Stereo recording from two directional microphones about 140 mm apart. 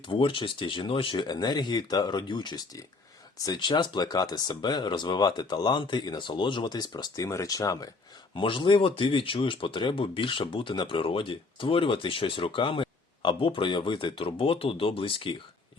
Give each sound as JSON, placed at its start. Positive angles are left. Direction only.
{"t": 0.1, "sound": "speech", "side_deg": 40}
{"t": 8.4, "sound": "speech", "side_deg": 35}